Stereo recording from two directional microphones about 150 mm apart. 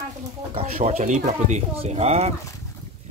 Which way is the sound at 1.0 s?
55° right (ahead or behind).